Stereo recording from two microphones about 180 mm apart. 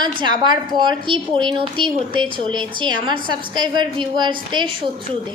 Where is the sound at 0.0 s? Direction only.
25° right (ahead or behind).